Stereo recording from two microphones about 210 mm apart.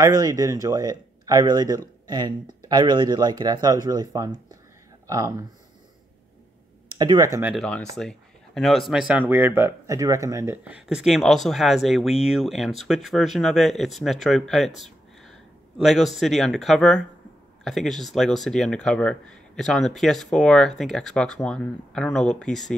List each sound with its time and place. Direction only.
0.0 s speech: 15° right (ahead or behind)
7.0 s speech: 15° right (ahead or behind)
7.5 s speech: 5° left (ahead or behind)